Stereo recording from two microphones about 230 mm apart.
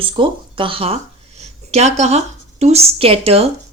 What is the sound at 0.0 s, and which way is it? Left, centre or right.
Speech, right.